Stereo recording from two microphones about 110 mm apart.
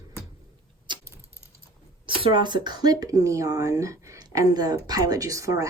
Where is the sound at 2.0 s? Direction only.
55° right (ahead or behind).